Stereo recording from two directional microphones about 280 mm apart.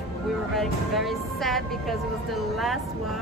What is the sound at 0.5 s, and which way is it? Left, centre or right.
Speech, centre.